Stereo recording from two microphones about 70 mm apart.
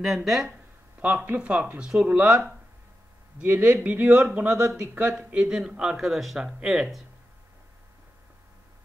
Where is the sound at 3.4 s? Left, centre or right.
Centre.